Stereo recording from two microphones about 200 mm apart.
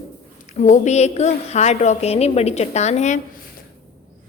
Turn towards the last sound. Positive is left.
turn(degrees=35)  # may be behind; listen again after turning